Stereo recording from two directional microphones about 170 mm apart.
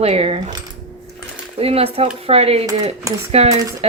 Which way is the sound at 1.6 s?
35° right (ahead or behind).